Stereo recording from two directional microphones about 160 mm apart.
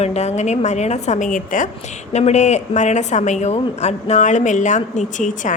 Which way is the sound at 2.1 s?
45° left (ahead or behind).